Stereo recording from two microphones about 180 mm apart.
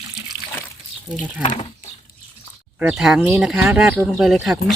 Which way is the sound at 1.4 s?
35° left (ahead or behind).